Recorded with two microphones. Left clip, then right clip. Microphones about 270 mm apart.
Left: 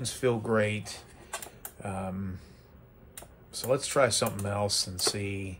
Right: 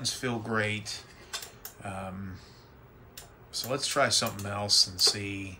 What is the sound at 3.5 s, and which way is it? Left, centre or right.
Speech, centre.